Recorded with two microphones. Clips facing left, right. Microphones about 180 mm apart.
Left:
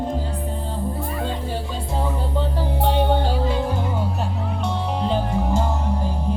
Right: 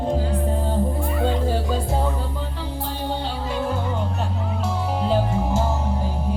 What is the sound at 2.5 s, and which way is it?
Music, 50° left (ahead or behind).